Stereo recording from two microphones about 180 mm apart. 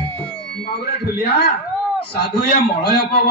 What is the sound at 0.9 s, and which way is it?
A man's voice, 60° left (ahead or behind).